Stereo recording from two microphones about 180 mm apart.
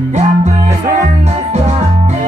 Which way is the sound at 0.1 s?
40° right (ahead or behind).